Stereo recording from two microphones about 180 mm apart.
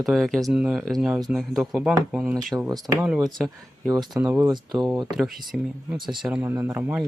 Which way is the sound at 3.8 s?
20° right (ahead or behind).